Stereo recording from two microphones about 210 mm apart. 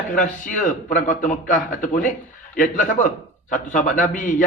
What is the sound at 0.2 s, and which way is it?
A man's voice, 40° left (ahead or behind).